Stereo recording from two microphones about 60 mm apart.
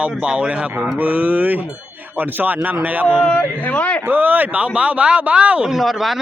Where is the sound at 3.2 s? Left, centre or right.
Left.